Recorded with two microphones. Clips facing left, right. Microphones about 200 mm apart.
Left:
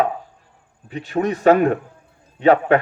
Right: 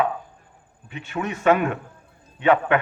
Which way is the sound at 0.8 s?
35° left (ahead or behind).